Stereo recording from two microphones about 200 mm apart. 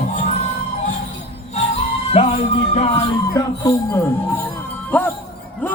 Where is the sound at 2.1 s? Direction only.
30° left (ahead or behind).